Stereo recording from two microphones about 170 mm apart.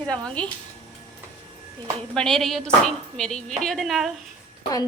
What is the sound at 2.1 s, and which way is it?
A woman's voice, centre (ahead or behind).